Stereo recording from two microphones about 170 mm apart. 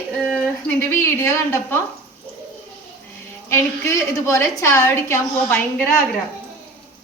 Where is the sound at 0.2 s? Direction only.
5° left (ahead or behind).